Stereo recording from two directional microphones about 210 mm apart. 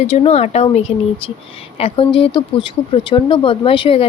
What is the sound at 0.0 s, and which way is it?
Speech, 30° left (ahead or behind).